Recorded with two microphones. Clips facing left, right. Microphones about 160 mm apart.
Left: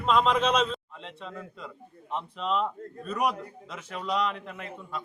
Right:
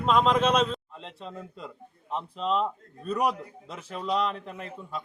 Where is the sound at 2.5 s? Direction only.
Centre (ahead or behind).